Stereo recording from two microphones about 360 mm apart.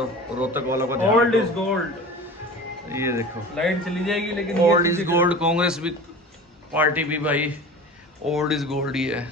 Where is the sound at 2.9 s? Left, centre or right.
Centre.